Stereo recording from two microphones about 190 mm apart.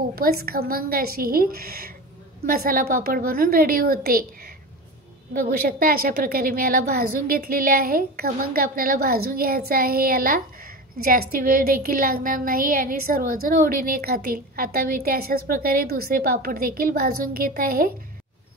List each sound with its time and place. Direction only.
0.1 s a woman's voice: 55° right (ahead or behind)